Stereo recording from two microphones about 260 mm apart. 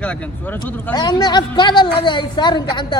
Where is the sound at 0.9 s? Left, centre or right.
Centre.